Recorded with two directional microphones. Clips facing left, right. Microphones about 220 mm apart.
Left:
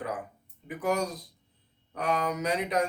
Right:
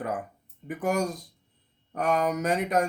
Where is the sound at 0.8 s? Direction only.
45° right (ahead or behind).